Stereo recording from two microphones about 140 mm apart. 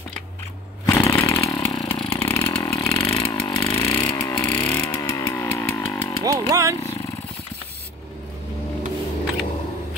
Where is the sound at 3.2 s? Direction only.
30° left (ahead or behind).